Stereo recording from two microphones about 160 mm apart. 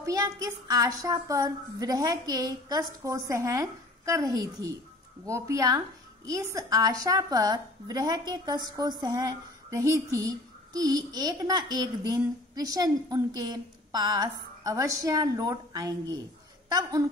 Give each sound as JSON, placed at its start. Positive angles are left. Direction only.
{"t": 0.0, "sound": "a woman's voice", "side_deg": -20}